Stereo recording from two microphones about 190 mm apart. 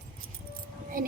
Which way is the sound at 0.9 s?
45° right (ahead or behind).